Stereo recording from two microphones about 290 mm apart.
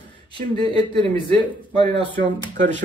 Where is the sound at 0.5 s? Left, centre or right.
Centre.